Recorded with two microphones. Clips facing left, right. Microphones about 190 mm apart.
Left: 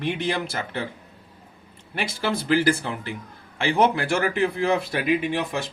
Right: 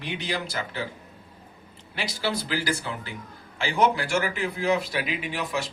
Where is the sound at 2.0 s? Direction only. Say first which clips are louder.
Left 3 dB; 55° left (ahead or behind).